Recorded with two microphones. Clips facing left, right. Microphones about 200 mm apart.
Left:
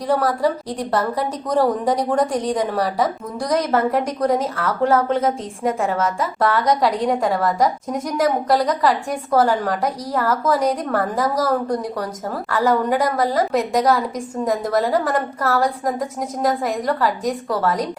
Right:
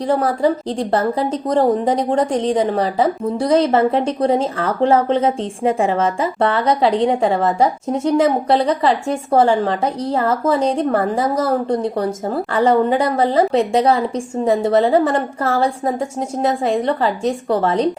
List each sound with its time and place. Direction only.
0.8 s a woman's voice: 25° right (ahead or behind)